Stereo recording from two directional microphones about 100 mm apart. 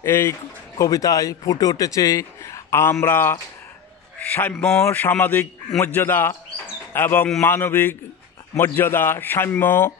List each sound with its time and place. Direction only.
0.0 s a man's voice: 25° left (ahead or behind)